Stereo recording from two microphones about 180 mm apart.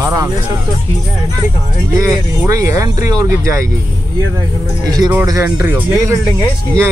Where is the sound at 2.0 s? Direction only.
20° right (ahead or behind).